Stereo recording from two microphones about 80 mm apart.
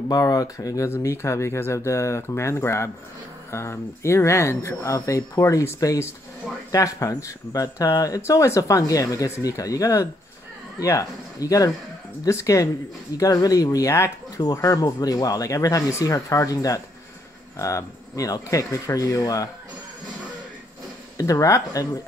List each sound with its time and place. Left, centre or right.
0.1 s speech: left
14.3 s speech: left
21.2 s speech: left